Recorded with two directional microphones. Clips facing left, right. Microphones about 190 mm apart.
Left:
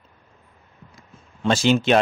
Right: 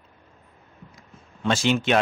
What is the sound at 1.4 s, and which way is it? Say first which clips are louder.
Speech: left 4 dB; 35° left (ahead or behind).